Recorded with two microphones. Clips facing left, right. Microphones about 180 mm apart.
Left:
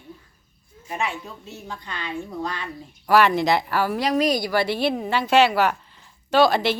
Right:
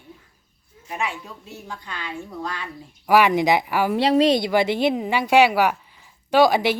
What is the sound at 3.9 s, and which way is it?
A woman's voice, 30° right (ahead or behind).